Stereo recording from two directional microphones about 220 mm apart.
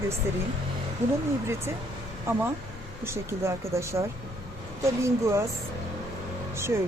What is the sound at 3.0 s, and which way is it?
Speech, 10° right (ahead or behind).